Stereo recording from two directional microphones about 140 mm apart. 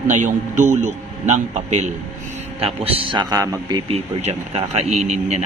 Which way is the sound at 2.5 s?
45° right (ahead or behind).